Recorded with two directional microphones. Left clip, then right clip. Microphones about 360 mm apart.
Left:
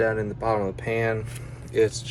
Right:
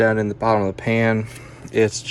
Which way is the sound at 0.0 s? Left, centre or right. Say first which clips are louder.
Right 6 dB; right.